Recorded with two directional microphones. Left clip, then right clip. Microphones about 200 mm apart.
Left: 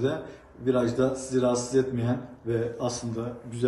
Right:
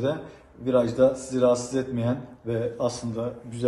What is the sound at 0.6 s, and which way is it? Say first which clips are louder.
A man's voice: right 4 dB; 20° right (ahead or behind).